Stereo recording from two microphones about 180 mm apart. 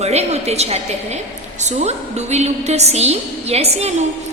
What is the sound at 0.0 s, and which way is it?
A woman's voice, 35° right (ahead or behind).